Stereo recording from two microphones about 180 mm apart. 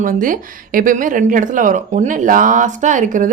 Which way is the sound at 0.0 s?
50° right (ahead or behind).